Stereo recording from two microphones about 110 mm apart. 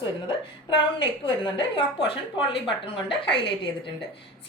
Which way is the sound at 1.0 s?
45° left (ahead or behind).